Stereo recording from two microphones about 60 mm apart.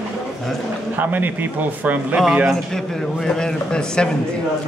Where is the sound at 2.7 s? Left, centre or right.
Centre.